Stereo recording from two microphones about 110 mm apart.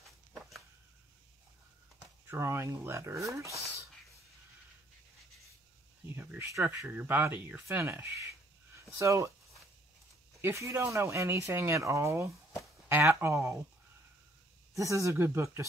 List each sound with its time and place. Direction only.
2.2 s speech: 25° right (ahead or behind)
6.0 s a sound: 20° right (ahead or behind)
6.9 s speech: 15° right (ahead or behind)
10.4 s speech: 25° right (ahead or behind)
14.7 s speech: 30° right (ahead or behind)